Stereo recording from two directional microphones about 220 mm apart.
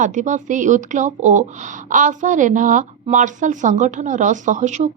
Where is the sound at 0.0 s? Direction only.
35° right (ahead or behind).